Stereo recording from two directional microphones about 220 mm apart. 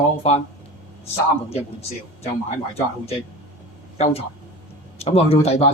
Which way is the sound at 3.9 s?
30° left (ahead or behind).